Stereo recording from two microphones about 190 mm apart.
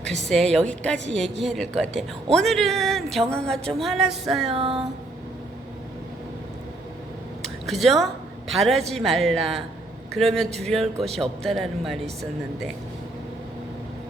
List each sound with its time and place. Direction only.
0.0 s a woman's voice: centre (ahead or behind)
4.4 s speech: 30° right (ahead or behind)
7.4 s a woman's voice: centre (ahead or behind)